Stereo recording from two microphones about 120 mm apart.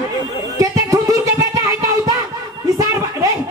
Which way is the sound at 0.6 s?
30° right (ahead or behind).